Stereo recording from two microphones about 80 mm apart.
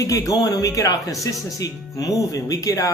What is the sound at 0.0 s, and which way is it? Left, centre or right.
Speech, left.